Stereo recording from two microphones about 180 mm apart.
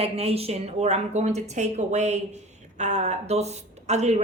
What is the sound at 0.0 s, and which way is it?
A woman's voice, 35° right (ahead or behind).